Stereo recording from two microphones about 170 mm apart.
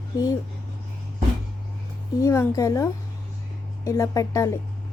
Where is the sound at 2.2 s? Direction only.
15° left (ahead or behind).